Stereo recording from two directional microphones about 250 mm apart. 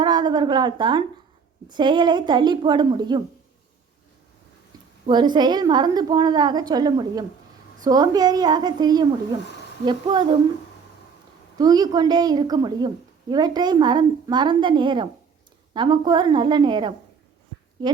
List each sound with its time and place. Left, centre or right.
0.0 s a woman's voice: centre
5.0 s a woman's voice: centre
11.5 s a woman's voice: centre